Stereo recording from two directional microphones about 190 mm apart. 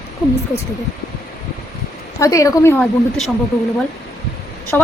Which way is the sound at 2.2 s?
15° left (ahead or behind).